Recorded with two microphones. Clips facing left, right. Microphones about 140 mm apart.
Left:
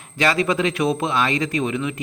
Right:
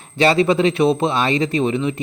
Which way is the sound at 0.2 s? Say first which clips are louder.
Right 5 dB; 30° right (ahead or behind).